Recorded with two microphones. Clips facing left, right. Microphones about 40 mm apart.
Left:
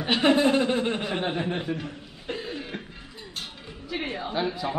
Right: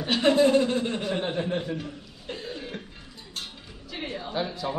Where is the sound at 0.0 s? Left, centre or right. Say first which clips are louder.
Even; left.